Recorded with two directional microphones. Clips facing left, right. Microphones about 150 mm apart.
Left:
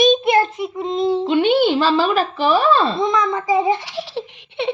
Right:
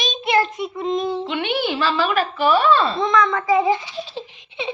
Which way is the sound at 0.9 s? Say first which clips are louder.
Left 9 dB; 30° left (ahead or behind).